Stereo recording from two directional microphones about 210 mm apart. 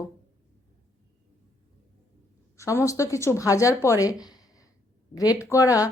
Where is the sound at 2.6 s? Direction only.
15° left (ahead or behind).